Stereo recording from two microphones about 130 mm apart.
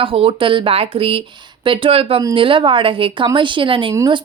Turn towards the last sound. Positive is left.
turn(degrees=-40)  # may be behind; listen again after turning